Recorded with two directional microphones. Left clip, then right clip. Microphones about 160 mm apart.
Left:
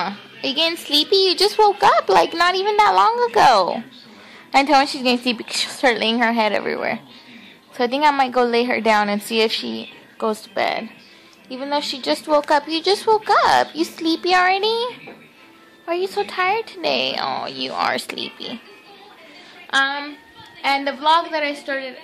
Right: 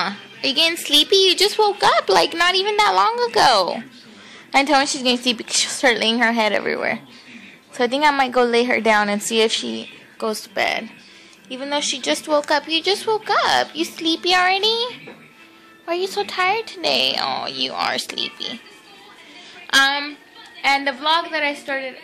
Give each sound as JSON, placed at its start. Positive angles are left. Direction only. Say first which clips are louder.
{"t": 0.0, "sound": "a child's voice", "louder": "right 2 dB", "side_deg": 5}
{"t": 10.1, "sound": "a child's voice", "louder": "left 1 dB", "side_deg": 15}
{"t": 19.7, "sound": "a woman's voice", "louder": "right 3 dB", "side_deg": -5}